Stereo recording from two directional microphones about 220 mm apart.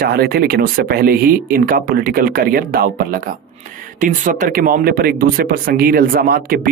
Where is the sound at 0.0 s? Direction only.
45° right (ahead or behind).